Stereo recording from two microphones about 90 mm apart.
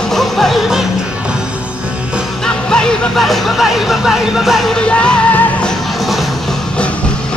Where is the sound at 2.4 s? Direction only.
10° left (ahead or behind).